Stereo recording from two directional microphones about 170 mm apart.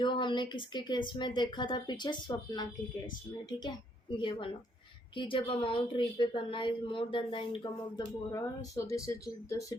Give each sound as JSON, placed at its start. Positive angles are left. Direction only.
{"t": 0.0, "sound": "a woman's voice", "side_deg": 30}
{"t": 4.2, "sound": "a woman's voice", "side_deg": 30}